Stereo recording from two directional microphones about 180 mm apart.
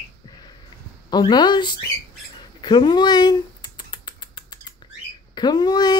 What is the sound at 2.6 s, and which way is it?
Rodents, 25° left (ahead or behind).